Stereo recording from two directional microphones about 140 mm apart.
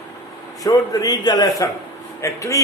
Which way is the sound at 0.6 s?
25° left (ahead or behind).